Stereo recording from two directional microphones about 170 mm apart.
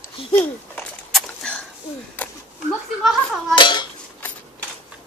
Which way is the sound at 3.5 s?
25° left (ahead or behind).